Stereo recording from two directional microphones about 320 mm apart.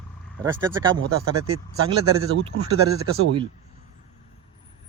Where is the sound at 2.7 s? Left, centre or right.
Right.